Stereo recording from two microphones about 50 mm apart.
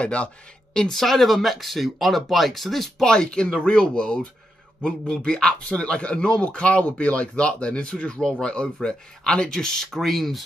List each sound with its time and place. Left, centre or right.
0.0 s a man's voice: left
0.7 s speech: centre
3.1 s a man's voice: centre
8.2 s speech: centre